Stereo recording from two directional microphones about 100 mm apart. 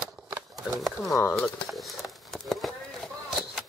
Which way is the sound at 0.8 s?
Centre (ahead or behind).